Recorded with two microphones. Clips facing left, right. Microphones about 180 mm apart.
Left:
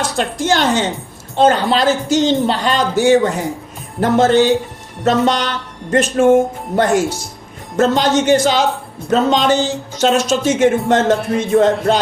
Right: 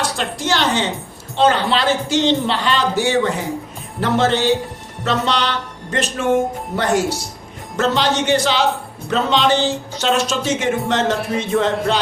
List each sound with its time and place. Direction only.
0.2 s speech: 50° left (ahead or behind)